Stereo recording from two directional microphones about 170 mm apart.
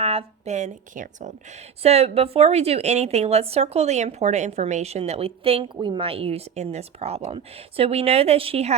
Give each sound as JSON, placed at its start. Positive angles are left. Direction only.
{"t": 0.0, "sound": "a woman's voice", "side_deg": -35}